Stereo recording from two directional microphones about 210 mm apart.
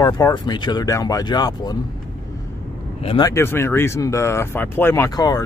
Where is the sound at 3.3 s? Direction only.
10° left (ahead or behind).